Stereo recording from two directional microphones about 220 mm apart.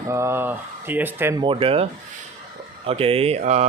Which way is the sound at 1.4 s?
25° right (ahead or behind).